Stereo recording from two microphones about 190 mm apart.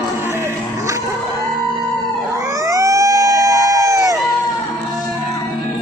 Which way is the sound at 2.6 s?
15° right (ahead or behind).